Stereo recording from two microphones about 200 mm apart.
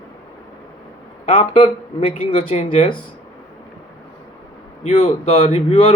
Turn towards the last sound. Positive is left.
turn(degrees=35)  # may be behind; listen again after turning